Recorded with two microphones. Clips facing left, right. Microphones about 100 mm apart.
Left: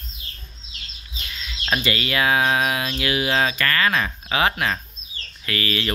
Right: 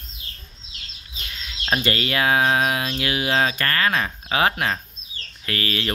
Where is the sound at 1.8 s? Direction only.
40° right (ahead or behind).